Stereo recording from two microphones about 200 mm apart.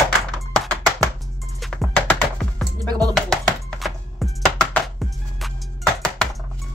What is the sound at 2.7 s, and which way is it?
Music, 15° right (ahead or behind).